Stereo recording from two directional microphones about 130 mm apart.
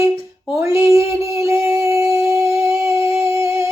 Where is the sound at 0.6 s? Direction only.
20° right (ahead or behind).